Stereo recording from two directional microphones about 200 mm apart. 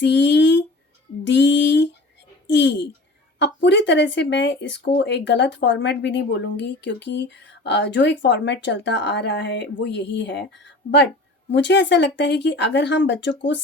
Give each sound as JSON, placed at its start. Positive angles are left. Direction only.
{"t": 0.0, "sound": "speech", "side_deg": 60}
{"t": 11.5, "sound": "speech", "side_deg": 60}